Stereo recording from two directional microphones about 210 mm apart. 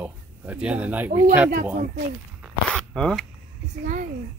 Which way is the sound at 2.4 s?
5° left (ahead or behind).